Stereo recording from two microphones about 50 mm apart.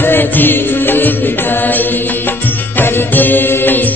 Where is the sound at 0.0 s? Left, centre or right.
Left.